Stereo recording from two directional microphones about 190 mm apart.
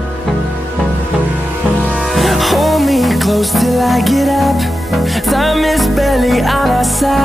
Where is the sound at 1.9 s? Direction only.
Centre (ahead or behind).